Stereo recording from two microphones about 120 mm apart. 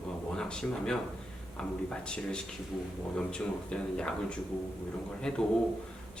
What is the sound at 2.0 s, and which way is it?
A man's voice, 5° left (ahead or behind).